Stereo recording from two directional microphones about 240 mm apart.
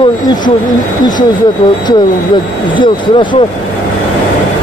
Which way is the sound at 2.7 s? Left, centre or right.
Centre.